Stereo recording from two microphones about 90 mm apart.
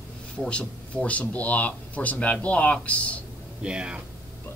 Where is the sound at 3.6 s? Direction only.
10° right (ahead or behind).